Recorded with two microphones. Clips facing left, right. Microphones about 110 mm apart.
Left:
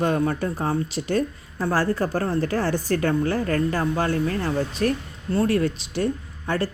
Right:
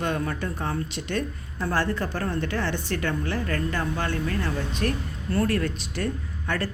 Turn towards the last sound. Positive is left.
turn(degrees=30)  # may be behind; listen again after turning